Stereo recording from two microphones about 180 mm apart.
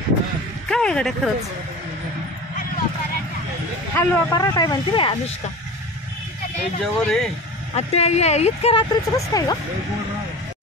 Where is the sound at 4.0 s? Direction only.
15° left (ahead or behind).